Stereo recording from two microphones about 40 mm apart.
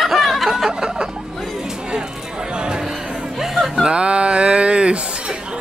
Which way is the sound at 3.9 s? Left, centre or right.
Right.